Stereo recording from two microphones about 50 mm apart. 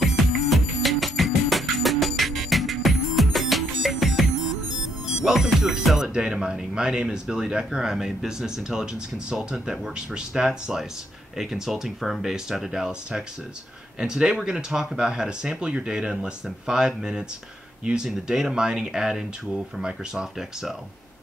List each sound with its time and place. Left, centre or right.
0.0 s music: centre
5.9 s speech: centre